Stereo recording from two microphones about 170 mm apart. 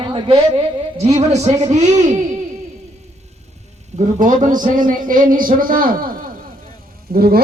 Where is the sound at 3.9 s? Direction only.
45° right (ahead or behind); by 7.4 s 65° right (ahead or behind).